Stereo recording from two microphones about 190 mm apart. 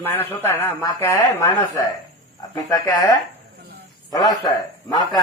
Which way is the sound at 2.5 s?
20° left (ahead or behind).